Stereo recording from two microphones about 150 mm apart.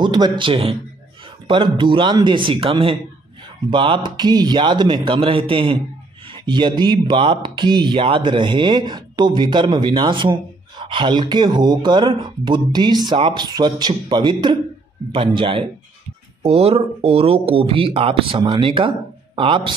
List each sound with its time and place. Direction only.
0.0 s a man's voice: 30° right (ahead or behind)